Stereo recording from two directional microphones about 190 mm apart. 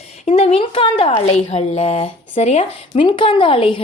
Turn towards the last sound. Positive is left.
turn(degrees=25)  # may be behind; listen again after turning